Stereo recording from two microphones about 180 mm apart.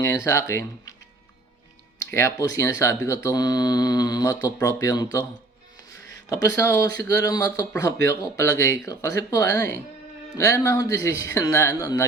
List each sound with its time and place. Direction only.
0.0 s speech: 15° left (ahead or behind)
2.0 s speech: 15° left (ahead or behind)
6.2 s speech: 20° left (ahead or behind)